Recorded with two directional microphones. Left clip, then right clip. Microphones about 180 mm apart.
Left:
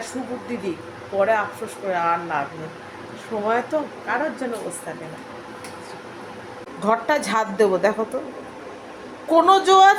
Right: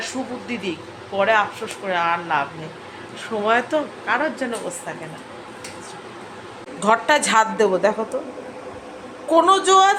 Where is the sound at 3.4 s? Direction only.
5° right (ahead or behind).